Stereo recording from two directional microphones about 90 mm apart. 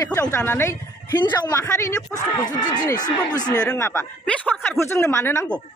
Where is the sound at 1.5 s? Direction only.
35° left (ahead or behind).